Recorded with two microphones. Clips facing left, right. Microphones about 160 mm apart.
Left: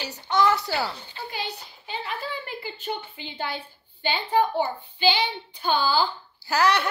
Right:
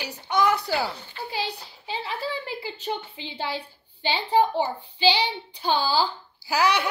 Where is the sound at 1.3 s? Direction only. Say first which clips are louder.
Right 4 dB; 30° right (ahead or behind).